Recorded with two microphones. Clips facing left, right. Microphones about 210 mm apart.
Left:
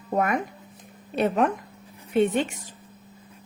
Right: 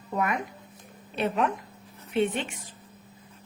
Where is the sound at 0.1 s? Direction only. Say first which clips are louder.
Left 4 dB; 45° left (ahead or behind).